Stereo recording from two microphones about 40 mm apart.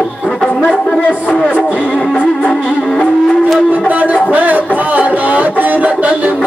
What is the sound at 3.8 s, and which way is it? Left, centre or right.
Speech, right.